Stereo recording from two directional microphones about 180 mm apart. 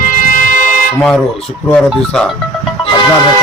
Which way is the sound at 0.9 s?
5° left (ahead or behind).